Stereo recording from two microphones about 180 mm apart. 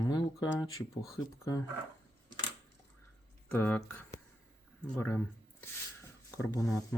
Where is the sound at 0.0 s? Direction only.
20° left (ahead or behind).